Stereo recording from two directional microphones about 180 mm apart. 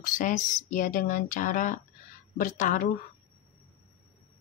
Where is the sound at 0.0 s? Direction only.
45° left (ahead or behind).